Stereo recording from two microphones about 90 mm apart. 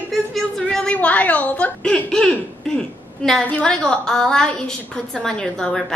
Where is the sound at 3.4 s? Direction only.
15° left (ahead or behind).